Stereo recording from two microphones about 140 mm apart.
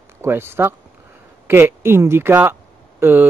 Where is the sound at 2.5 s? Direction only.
15° right (ahead or behind).